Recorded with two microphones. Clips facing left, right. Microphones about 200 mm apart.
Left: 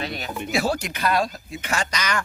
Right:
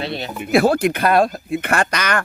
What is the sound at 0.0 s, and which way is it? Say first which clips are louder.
Speech: right 5 dB; 30° right (ahead or behind).